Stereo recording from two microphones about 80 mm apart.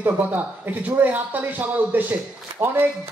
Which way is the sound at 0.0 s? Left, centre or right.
Right.